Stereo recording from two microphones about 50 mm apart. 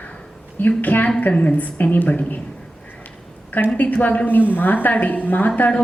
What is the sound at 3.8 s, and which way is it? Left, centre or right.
Speech, left.